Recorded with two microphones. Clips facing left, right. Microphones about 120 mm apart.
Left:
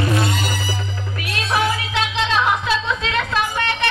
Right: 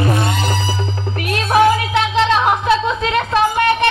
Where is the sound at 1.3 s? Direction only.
50° right (ahead or behind).